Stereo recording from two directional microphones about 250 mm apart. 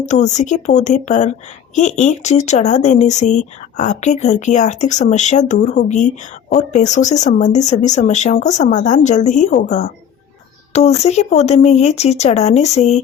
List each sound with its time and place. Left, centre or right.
0.0 s a woman's voice: left